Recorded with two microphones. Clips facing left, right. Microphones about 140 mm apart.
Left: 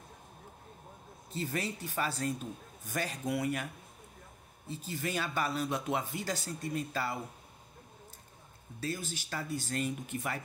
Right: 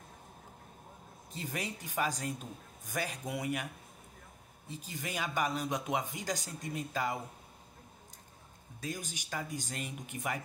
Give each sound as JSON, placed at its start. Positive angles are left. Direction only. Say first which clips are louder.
{"t": 1.3, "sound": "speech", "louder": "left 4 dB", "side_deg": -15}
{"t": 4.6, "sound": "speech", "louder": "left 5 dB", "side_deg": -15}
{"t": 8.8, "sound": "speech", "louder": "left 3 dB", "side_deg": -15}